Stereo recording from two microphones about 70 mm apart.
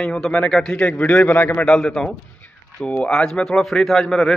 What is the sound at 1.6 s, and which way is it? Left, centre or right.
A man's voice, centre.